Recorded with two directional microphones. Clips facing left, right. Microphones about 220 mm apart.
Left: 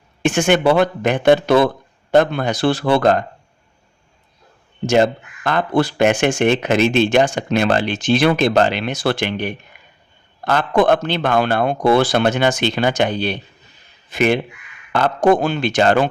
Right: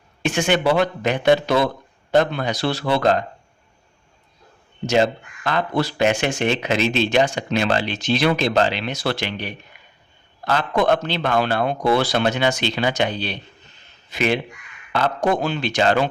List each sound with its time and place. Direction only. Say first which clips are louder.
0.3 s speech: left 4 dB; 50° left (ahead or behind)
4.9 s speech: left 3 dB; 50° left (ahead or behind)